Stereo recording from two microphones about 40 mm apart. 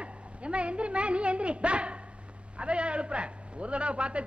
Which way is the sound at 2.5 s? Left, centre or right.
Right.